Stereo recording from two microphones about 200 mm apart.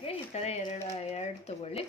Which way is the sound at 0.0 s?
30° left (ahead or behind).